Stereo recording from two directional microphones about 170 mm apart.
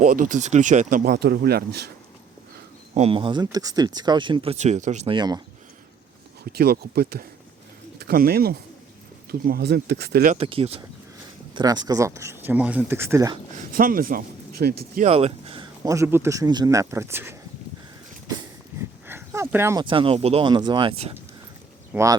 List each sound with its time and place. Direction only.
0.0 s speech: 50° right (ahead or behind)
1.1 s speech: 70° right (ahead or behind)
2.9 s speech: 35° right (ahead or behind)
4.5 s speech: 45° right (ahead or behind)
5.1 s speech: 25° right (ahead or behind)
6.4 s speech: 65° right (ahead or behind)
10.3 s speech: 35° right (ahead or behind)
11.5 s speech: 25° right (ahead or behind)
13.6 s speech: 55° right (ahead or behind)
15.0 s speech: 35° right (ahead or behind); by 17.3 s 15° right (ahead or behind)
19.0 s a sound: 15° right (ahead or behind)
19.8 s speech: 30° right (ahead or behind)
21.9 s speech: 20° right (ahead or behind)